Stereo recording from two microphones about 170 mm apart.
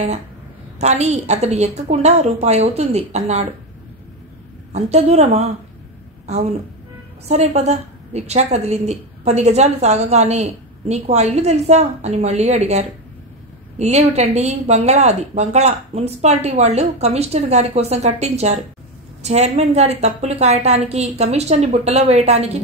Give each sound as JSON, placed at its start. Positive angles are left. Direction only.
{"t": 0.7, "sound": "a woman's voice", "side_deg": -40}
{"t": 4.7, "sound": "a woman's voice", "side_deg": -40}